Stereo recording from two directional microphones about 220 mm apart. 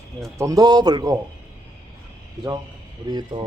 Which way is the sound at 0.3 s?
15° right (ahead or behind).